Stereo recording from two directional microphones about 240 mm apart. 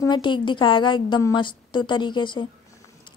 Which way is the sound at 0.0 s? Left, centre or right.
Centre.